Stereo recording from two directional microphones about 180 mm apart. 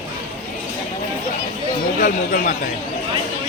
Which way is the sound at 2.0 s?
50° left (ahead or behind).